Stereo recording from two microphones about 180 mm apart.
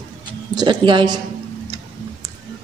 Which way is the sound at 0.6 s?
25° right (ahead or behind).